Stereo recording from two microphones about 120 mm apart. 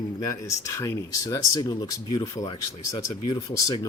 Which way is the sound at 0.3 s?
25° left (ahead or behind).